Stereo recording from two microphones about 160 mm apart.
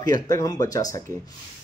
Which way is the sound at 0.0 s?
20° left (ahead or behind).